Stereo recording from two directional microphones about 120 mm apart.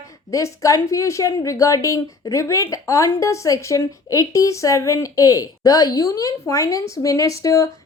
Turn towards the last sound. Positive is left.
turn(degrees=25)  # may be behind; listen again after turning